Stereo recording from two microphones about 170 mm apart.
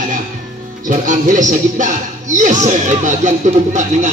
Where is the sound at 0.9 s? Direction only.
45° right (ahead or behind).